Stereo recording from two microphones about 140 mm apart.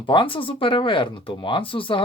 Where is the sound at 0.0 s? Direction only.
35° left (ahead or behind).